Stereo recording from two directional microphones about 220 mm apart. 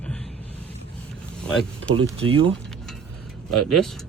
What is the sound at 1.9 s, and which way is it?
Speech, 25° right (ahead or behind).